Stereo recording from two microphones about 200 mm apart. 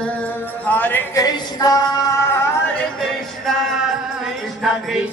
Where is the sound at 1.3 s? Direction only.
20° left (ahead or behind).